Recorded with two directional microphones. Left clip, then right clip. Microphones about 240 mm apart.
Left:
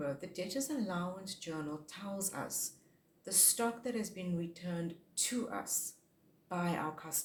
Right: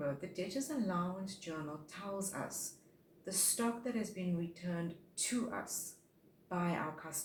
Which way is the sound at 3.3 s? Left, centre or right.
Left.